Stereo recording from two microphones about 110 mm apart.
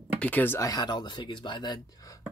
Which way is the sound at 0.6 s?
35° left (ahead or behind).